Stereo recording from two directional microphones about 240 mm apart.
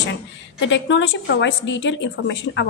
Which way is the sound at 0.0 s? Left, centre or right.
Left.